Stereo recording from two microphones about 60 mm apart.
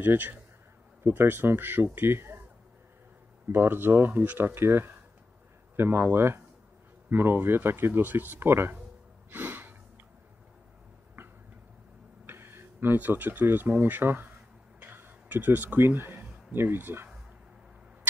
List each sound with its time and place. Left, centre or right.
0.0 s speech: right
3.5 s speech: right
9.3 s gasp: right
12.3 s speech: right
14.8 s a sound: right
16.5 s speech: right